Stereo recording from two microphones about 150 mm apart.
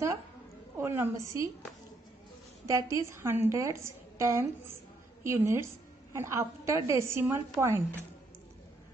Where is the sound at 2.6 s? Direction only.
20° right (ahead or behind).